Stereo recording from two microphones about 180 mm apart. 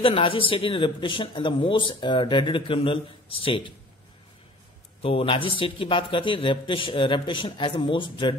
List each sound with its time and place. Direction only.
0.0 s speech: 30° left (ahead or behind)
5.0 s speech: 30° left (ahead or behind)